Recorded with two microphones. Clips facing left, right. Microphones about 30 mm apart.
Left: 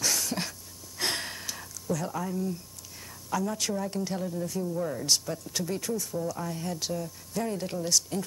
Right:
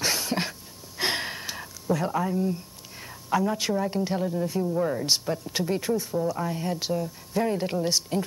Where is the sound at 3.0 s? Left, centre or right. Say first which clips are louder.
Right 6 dB; right.